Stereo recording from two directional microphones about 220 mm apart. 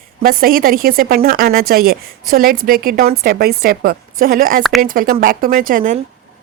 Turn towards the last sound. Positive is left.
turn(degrees=-40)  # may be behind; listen again after turning